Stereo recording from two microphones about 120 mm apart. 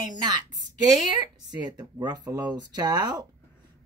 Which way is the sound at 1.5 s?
35° right (ahead or behind).